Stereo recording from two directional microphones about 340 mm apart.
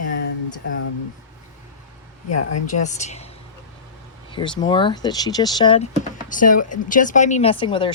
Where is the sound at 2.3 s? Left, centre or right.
Left.